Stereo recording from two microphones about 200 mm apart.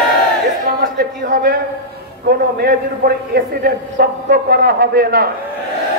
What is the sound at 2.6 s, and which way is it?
A man's voice, 50° right (ahead or behind).